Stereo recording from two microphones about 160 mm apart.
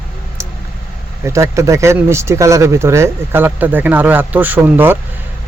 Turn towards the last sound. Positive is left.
turn(degrees=-10)  # may be behind; listen again after turning